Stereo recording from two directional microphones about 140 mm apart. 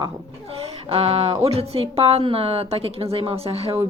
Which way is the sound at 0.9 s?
45° right (ahead or behind).